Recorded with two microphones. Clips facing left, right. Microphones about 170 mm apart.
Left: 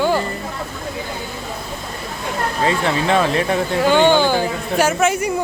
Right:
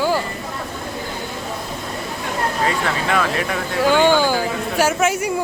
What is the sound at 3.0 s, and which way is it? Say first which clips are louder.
Speech: left 5 dB; 30° left (ahead or behind).